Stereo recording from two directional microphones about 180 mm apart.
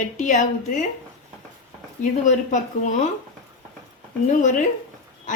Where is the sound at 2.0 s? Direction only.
45° left (ahead or behind).